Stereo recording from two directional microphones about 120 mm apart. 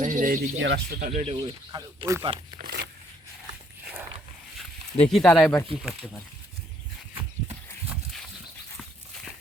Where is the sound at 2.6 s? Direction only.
90° right.